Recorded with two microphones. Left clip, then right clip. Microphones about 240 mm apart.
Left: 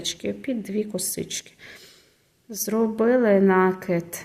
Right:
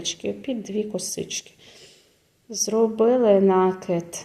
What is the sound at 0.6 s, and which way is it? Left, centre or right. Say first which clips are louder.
Speech: right 1 dB; left.